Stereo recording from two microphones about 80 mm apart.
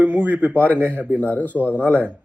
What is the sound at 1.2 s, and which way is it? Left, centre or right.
Speech, centre.